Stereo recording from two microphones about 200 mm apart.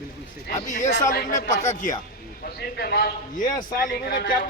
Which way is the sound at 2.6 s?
55° left (ahead or behind).